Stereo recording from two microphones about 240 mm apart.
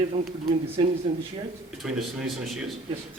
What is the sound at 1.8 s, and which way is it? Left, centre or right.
Speech, centre.